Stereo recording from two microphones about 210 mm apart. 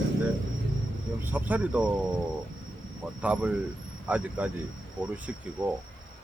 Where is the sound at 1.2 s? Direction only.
10° right (ahead or behind).